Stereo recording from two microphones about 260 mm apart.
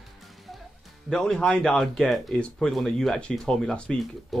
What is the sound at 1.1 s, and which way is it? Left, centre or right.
Speech, centre.